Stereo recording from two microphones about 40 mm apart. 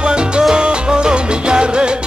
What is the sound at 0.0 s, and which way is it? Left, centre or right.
Salsa music, right.